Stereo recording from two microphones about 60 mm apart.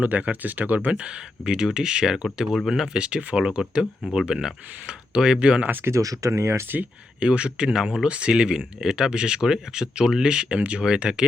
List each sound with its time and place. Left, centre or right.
0.0 s speech: right
5.6 s speech: right
5.9 s speech: right
7.2 s speech: centre